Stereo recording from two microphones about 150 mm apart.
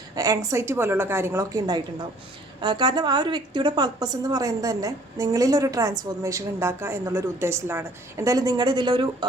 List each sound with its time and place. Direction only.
0.2 s a woman's voice: 20° right (ahead or behind)